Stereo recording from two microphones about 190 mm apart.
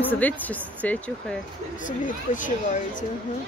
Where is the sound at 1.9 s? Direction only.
45° left (ahead or behind).